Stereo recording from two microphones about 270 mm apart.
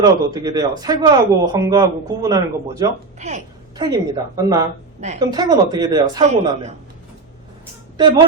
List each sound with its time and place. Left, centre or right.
0.0 s a man's voice: centre
3.2 s a woman's voice: right
7.9 s speech: centre